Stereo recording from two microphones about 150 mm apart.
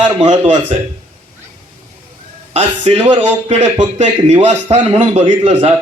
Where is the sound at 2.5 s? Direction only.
45° right (ahead or behind).